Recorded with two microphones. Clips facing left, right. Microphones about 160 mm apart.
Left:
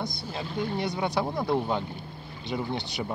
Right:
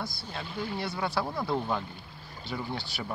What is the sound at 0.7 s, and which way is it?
Speech, 20° left (ahead or behind).